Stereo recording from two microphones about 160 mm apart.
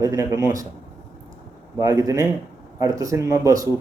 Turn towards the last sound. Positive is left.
turn(degrees=-20)  # may be behind; listen again after turning